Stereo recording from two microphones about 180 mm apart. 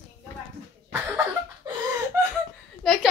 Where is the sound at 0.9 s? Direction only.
10° right (ahead or behind).